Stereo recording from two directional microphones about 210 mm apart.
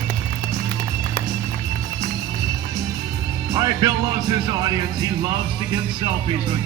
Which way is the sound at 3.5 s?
20° right (ahead or behind).